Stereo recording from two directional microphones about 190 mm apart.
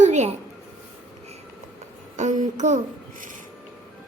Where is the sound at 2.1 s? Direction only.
40° right (ahead or behind).